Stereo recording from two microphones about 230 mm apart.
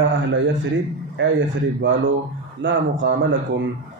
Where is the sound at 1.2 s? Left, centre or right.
Right.